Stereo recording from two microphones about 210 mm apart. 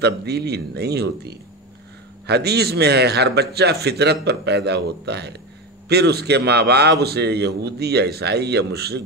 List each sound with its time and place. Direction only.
0.0 s a man's voice: 50° right (ahead or behind)